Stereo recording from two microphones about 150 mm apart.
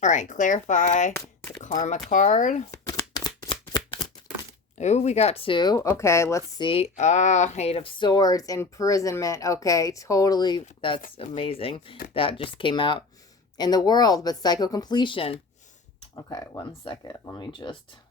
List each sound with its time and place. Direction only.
0.0 s speech: 55° left (ahead or behind)
1.1 s speech: 15° left (ahead or behind)
1.6 s speech: 55° left (ahead or behind)
2.8 s shuffling cards: 25° left (ahead or behind)
4.8 s speech: 50° left (ahead or behind); by 6.6 s 20° left (ahead or behind)
6.6 s speech: 40° left (ahead or behind)
16.1 s speech: 25° left (ahead or behind)